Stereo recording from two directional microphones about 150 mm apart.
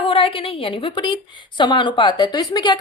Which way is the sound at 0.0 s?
35° left (ahead or behind).